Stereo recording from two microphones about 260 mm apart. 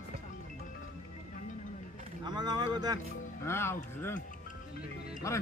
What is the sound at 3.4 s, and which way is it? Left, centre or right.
Speech, centre.